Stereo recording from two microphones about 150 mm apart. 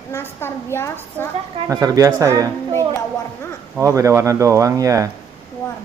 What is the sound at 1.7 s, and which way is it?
Speech, 20° right (ahead or behind).